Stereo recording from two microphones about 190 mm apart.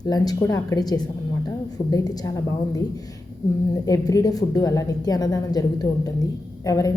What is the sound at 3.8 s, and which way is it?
A woman's voice, 15° left (ahead or behind).